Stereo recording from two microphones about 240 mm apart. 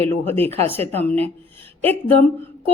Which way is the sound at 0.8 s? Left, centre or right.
Right.